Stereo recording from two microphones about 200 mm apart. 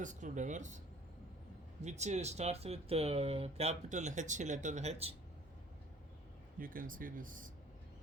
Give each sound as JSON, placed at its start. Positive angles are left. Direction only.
{"t": 0.0, "sound": "speech", "side_deg": -40}
{"t": 1.8, "sound": "speech", "side_deg": -35}
{"t": 6.6, "sound": "speech", "side_deg": -45}